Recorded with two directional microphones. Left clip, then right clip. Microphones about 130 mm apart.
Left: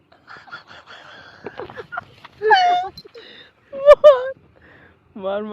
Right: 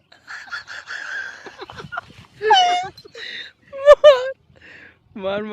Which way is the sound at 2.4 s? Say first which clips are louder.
Even; 90° right.